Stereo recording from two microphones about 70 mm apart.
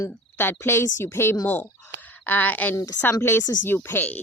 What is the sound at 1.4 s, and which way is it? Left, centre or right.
Speech, left.